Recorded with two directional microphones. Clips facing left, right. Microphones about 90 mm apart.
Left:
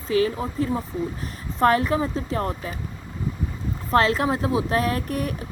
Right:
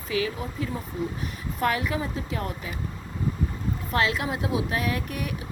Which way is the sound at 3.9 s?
40° left (ahead or behind).